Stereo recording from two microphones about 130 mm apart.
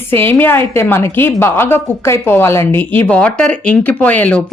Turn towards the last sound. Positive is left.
turn(degrees=10)  # may be behind; listen again after turning